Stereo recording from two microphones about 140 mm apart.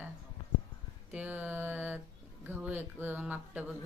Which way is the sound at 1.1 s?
10° right (ahead or behind).